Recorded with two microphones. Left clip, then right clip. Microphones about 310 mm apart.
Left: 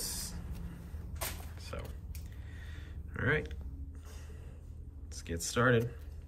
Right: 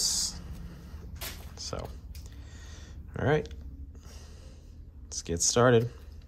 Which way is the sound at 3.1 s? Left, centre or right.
Centre.